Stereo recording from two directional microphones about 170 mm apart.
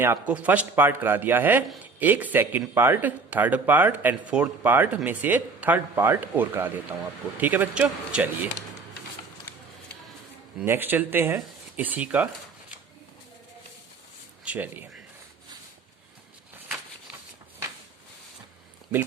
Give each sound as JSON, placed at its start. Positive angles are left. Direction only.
{"t": 0.0, "sound": "speech", "side_deg": -10}
{"t": 10.6, "sound": "speech", "side_deg": -10}
{"t": 14.4, "sound": "speech", "side_deg": -10}